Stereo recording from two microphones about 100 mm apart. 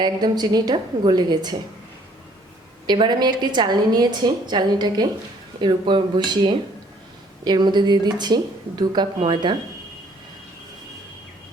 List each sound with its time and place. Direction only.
0.0 s a woman's voice: 45° right (ahead or behind)
2.8 s a woman's voice: 50° right (ahead or behind)